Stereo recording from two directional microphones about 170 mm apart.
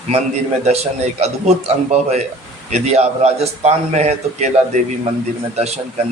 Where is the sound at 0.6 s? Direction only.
40° right (ahead or behind).